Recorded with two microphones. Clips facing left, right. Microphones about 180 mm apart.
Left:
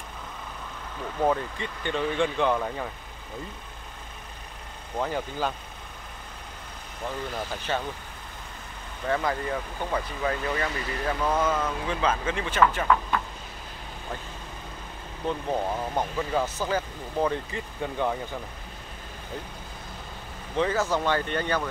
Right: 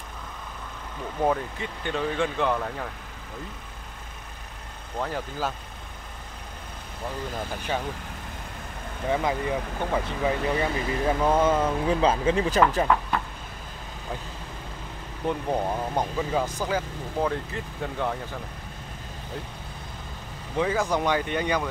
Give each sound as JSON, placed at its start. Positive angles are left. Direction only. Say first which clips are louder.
{"t": 1.2, "sound": "speech", "louder": "even", "side_deg": -5}
{"t": 4.9, "sound": "speech", "louder": "left 1 dB", "side_deg": 0}
{"t": 7.7, "sound": "speech", "louder": "even", "side_deg": -10}
{"t": 9.1, "sound": "speech", "louder": "right 2 dB", "side_deg": -10}
{"t": 15.2, "sound": "speech", "louder": "right 1 dB", "side_deg": -10}
{"t": 20.5, "sound": "speech", "louder": "even", "side_deg": -10}